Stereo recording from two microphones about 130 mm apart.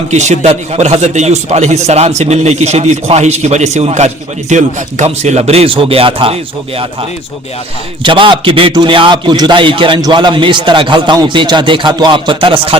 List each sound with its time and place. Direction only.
0.1 s a man's voice: 60° right (ahead or behind); by 6.8 s 45° right (ahead or behind)
8.0 s a man's voice: 40° right (ahead or behind)